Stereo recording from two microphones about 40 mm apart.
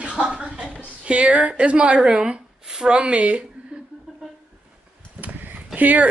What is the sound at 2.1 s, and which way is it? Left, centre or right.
Speech, centre.